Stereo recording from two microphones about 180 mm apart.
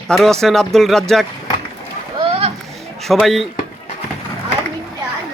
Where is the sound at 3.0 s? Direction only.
Centre (ahead or behind).